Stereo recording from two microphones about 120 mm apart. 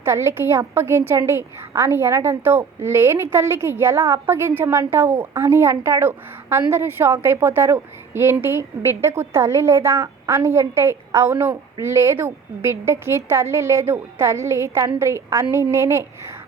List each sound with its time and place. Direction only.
0.0 s a woman's voice: 20° right (ahead or behind)